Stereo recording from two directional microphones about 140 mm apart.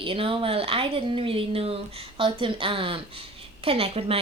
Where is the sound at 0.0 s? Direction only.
40° right (ahead or behind).